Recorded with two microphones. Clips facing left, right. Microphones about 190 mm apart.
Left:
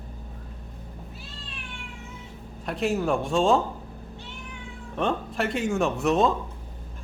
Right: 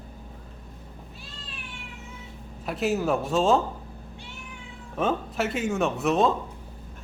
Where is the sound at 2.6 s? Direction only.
Centre (ahead or behind).